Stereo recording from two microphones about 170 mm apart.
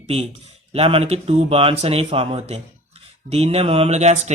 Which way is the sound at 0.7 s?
35° right (ahead or behind).